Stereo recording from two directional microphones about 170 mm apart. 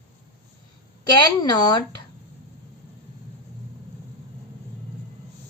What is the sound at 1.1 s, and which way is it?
Speech, 25° left (ahead or behind).